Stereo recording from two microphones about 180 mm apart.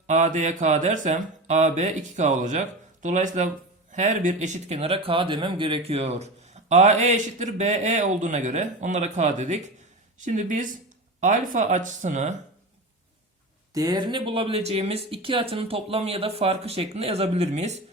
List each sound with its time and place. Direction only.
0.1 s speech: 45° right (ahead or behind)
13.7 s speech: 20° right (ahead or behind); by 17.7 s 40° right (ahead or behind)